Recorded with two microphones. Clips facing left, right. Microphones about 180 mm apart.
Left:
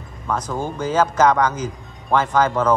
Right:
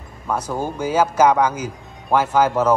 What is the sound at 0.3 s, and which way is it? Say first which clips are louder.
A man's voice: right 1 dB; 10° right (ahead or behind).